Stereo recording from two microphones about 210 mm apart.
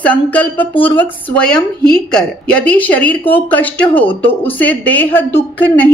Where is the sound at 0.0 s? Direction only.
5° left (ahead or behind).